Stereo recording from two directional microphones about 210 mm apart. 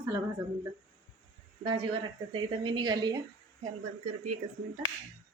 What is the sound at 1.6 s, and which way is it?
A woman's voice, 25° right (ahead or behind).